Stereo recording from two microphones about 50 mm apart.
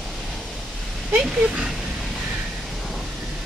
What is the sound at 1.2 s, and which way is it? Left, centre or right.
Speech, right.